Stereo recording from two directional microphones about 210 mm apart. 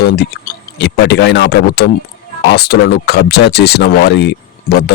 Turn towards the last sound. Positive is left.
turn(degrees=50)  # may be behind; listen again after turning